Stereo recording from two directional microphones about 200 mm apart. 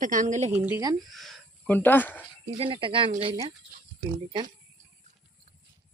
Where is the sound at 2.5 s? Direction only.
25° right (ahead or behind).